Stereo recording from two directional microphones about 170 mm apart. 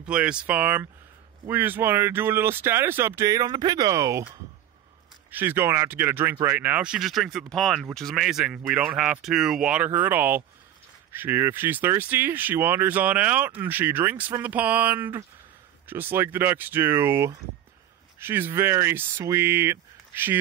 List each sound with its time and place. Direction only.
0.0 s speech: 5° right (ahead or behind)
5.3 s speech: 10° right (ahead or behind)